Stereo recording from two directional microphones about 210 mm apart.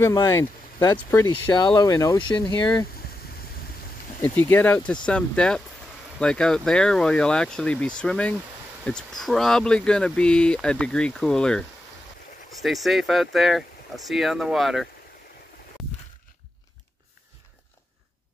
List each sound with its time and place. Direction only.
0.0 s speech: 15° left (ahead or behind)
4.2 s speech: 10° left (ahead or behind)
12.6 s speech: centre (ahead or behind)
15.8 s a sound: centre (ahead or behind)